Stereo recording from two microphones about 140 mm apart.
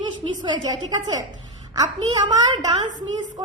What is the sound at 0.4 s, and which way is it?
A woman's voice, 30° right (ahead or behind).